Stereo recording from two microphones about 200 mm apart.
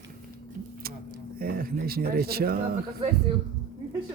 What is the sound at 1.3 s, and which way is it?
Speech, 45° right (ahead or behind).